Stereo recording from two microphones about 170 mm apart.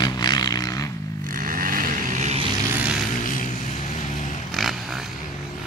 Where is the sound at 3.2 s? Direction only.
50° left (ahead or behind).